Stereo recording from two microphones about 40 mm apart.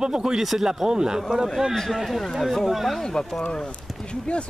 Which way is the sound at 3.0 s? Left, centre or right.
Centre.